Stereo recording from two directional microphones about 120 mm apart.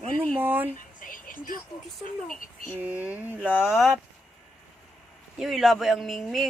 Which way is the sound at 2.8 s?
15° right (ahead or behind).